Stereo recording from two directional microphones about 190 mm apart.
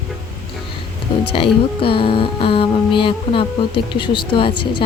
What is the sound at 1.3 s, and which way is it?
Speech, 30° left (ahead or behind).